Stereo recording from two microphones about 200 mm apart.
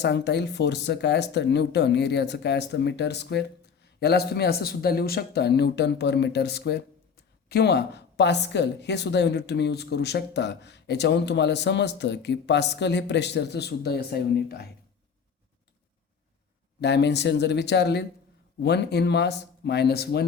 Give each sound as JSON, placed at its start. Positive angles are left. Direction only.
{"t": 0.0, "sound": "a woman's voice", "side_deg": 60}
{"t": 16.8, "sound": "a woman's voice", "side_deg": 60}